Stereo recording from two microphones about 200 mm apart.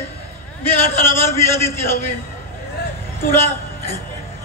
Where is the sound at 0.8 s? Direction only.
10° left (ahead or behind).